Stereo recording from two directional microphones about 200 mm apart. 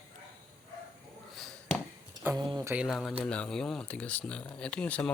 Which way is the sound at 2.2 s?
20° right (ahead or behind).